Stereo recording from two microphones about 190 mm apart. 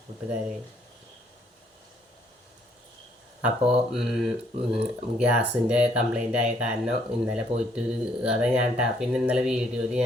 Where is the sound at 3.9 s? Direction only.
Centre (ahead or behind).